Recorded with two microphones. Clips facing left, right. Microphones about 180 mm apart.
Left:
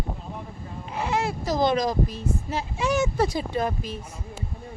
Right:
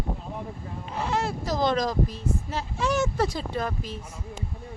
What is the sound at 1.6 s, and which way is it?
Speech, 20° left (ahead or behind).